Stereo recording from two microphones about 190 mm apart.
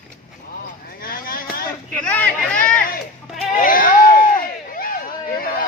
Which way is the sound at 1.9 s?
5° left (ahead or behind).